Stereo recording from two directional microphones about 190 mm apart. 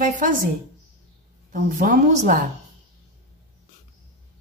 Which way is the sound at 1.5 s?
45° right (ahead or behind).